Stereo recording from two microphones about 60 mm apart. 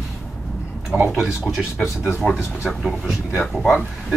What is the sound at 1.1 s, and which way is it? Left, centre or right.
Speech, centre.